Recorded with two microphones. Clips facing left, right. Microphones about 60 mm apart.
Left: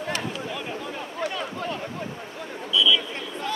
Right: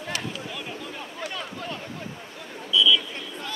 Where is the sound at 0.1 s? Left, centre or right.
Left.